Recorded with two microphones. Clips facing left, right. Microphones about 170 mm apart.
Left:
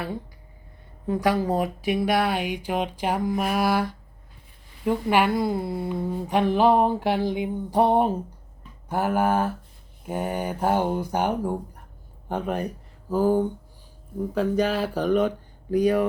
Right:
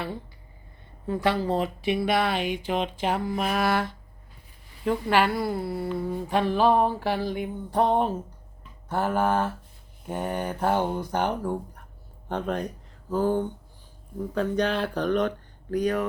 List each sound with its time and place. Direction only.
1.0 s speech: 10° left (ahead or behind)